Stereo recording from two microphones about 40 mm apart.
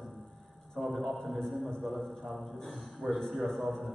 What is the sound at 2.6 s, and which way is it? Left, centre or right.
Speech, centre.